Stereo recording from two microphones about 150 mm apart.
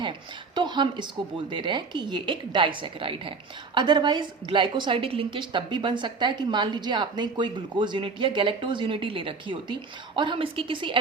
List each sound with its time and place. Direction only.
0.5 s a woman's voice: 30° right (ahead or behind)